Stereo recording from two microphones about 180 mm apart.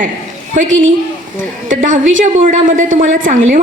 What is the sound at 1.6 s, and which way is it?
A woman's voice, 45° right (ahead or behind).